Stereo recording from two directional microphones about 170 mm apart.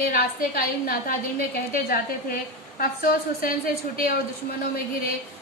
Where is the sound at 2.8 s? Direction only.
60° left (ahead or behind).